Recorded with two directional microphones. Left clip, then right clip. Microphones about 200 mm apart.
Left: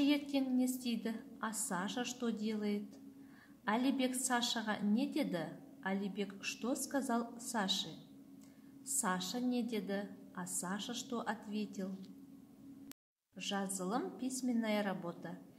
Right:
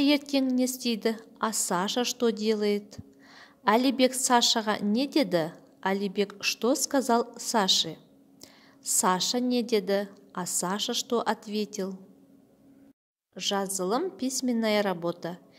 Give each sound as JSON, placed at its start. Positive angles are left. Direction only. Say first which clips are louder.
{"t": 0.0, "sound": "a woman's voice", "louder": "right 10 dB", "side_deg": -45}
{"t": 9.0, "sound": "a woman's voice", "louder": "right 12 dB", "side_deg": -45}
{"t": 13.3, "sound": "a woman's voice", "louder": "right 12 dB", "side_deg": -45}